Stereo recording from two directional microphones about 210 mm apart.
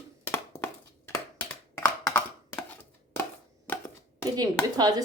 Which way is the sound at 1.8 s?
10° left (ahead or behind).